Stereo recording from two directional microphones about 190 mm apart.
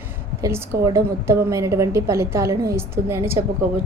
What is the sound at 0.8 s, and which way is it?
A woman's voice, 15° right (ahead or behind).